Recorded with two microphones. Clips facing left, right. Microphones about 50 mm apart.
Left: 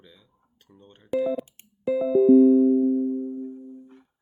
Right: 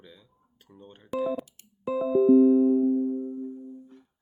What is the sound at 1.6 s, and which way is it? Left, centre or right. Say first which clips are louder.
Music: left 2 dB; left.